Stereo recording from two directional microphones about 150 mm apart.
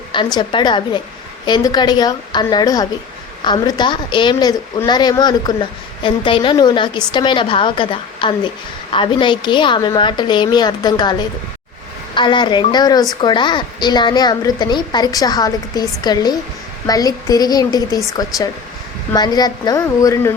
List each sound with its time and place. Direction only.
0.3 s a woman's voice: 30° left (ahead or behind)